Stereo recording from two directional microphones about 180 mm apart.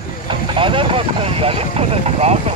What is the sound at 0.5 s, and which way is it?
Speech, 30° right (ahead or behind).